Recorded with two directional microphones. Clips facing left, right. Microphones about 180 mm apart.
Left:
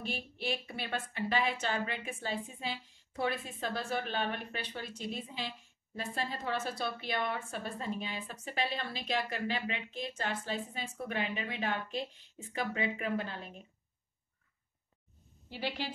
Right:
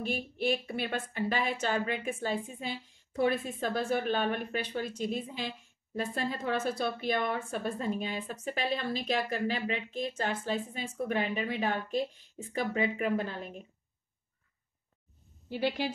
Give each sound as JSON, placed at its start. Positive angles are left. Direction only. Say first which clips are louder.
{"t": 0.0, "sound": "a woman's voice", "louder": "right 7 dB", "side_deg": -50}
{"t": 15.5, "sound": "a woman's voice", "louder": "right 7 dB", "side_deg": -50}